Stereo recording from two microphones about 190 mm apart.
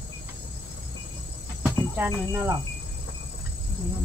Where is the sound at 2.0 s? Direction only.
10° right (ahead or behind).